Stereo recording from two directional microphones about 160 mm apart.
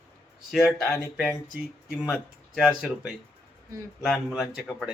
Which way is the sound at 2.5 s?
5° right (ahead or behind).